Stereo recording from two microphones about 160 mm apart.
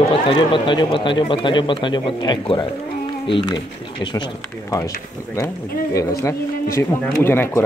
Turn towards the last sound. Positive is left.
turn(degrees=15)  # may be behind; listen again after turning